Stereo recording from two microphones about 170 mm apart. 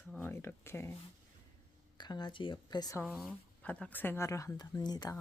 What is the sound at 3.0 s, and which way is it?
Speech, centre (ahead or behind).